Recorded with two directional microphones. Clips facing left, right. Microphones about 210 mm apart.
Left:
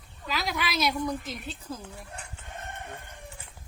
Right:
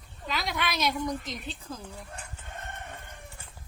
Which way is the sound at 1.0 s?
5° left (ahead or behind).